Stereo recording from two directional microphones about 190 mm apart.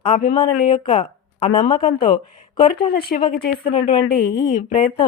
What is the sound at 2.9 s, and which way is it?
Speech, 50° left (ahead or behind).